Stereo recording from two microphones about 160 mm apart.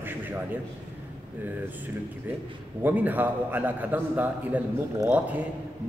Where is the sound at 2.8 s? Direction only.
10° right (ahead or behind).